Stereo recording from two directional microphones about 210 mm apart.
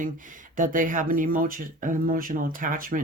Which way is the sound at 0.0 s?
40° right (ahead or behind).